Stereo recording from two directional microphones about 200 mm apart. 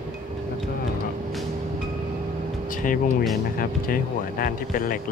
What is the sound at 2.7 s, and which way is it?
Music, 40° left (ahead or behind).